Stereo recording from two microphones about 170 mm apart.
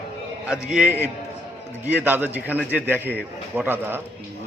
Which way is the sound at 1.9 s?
10° right (ahead or behind).